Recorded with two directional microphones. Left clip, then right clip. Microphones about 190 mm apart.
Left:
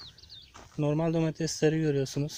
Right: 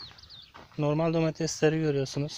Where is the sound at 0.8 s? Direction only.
25° left (ahead or behind).